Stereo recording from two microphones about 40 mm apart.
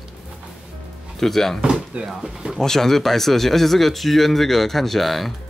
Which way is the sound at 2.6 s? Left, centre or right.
Centre.